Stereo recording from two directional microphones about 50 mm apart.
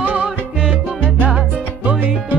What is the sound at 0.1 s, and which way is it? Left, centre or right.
Music, centre.